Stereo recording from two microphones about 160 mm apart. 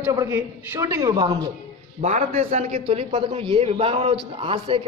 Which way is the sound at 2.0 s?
50° right (ahead or behind).